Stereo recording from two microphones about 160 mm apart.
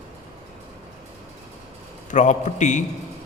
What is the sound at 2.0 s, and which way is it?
Speech, 50° left (ahead or behind).